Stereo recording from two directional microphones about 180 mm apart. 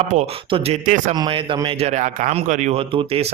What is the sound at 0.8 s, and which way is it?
Speech, 45° right (ahead or behind).